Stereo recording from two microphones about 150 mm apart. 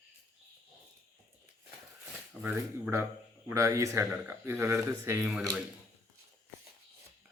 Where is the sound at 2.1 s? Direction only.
10° right (ahead or behind).